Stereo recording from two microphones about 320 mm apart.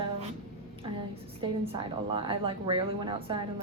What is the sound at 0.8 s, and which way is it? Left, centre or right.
A woman's voice, centre.